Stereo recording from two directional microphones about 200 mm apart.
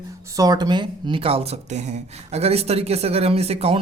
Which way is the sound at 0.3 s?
20° right (ahead or behind).